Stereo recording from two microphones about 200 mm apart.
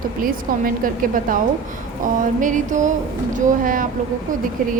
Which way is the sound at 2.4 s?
40° right (ahead or behind).